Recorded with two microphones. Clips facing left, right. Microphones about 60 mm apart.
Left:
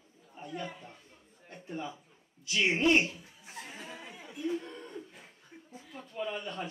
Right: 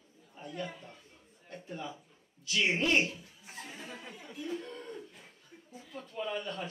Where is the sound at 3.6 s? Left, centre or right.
Centre.